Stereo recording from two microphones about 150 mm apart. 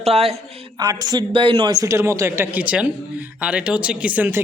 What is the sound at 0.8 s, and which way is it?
A man's voice, 25° right (ahead or behind).